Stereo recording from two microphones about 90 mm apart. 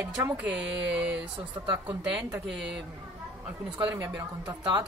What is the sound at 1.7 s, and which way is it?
Speech, 55° right (ahead or behind).